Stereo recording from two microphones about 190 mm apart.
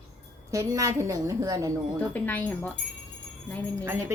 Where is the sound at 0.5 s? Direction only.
15° right (ahead or behind).